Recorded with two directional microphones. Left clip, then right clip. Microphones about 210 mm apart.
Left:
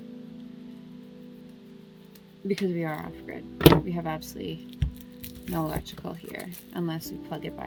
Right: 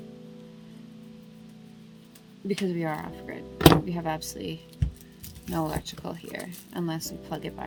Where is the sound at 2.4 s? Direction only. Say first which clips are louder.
Even; 5° right (ahead or behind).